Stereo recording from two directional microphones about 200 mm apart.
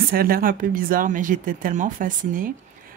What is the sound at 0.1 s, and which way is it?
Speech, 45° right (ahead or behind).